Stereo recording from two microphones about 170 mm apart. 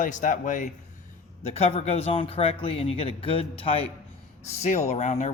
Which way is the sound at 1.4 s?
35° left (ahead or behind).